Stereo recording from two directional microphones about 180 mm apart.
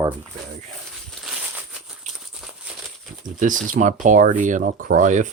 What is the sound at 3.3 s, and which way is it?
Speech, 45° right (ahead or behind).